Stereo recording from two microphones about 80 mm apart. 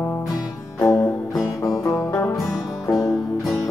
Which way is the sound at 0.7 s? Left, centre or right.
Left.